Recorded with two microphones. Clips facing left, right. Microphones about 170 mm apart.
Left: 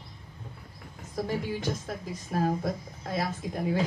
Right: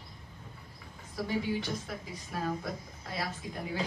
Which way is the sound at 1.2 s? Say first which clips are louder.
Left 2 dB; 45° left (ahead or behind).